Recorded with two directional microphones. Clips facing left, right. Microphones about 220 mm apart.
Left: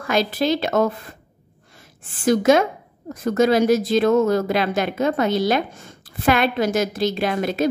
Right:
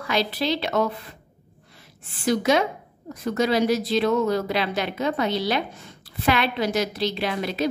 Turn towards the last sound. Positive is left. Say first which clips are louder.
# left 4 dB
turn(degrees=50)  # may be behind; listen again after turning